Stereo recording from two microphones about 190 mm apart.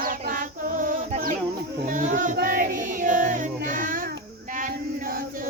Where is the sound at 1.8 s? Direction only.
40° right (ahead or behind).